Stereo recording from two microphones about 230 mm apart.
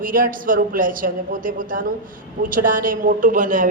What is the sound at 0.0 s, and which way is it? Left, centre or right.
A woman's voice, right.